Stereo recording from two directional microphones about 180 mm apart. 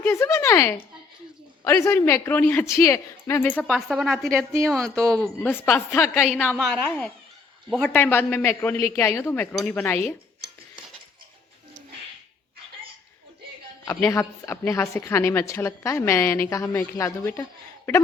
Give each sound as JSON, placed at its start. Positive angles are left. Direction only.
{"t": 0.0, "sound": "a woman's voice", "side_deg": 15}
{"t": 13.8, "sound": "a woman's voice", "side_deg": 15}